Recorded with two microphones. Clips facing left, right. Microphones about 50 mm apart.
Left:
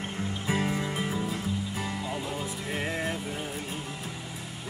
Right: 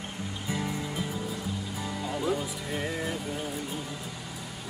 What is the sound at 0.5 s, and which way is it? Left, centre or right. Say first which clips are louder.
Music: left 4 dB; left.